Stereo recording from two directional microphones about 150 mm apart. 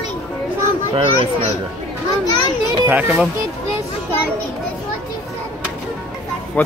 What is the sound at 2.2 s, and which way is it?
Speech, 25° left (ahead or behind).